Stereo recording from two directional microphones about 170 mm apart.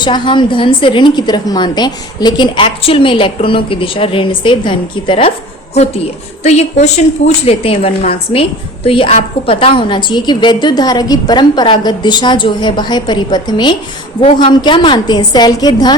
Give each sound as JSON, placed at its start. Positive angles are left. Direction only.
{"t": 0.0, "sound": "a woman's voice", "side_deg": 25}
{"t": 6.4, "sound": "a woman's voice", "side_deg": 40}